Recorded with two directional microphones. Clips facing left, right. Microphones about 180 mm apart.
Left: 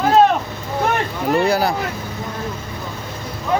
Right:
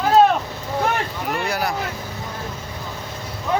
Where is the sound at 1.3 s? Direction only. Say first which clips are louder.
Left 8 dB; 30° left (ahead or behind).